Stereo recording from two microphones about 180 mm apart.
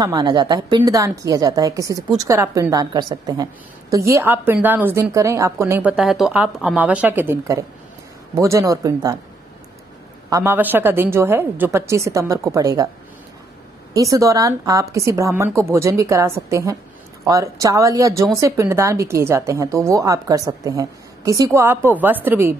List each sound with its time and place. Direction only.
0.0 s a woman's voice: 25° right (ahead or behind)
10.3 s a woman's voice: 10° right (ahead or behind)
13.9 s a woman's voice: 20° right (ahead or behind)